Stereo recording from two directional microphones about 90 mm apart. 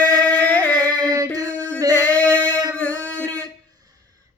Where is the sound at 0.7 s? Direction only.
40° right (ahead or behind).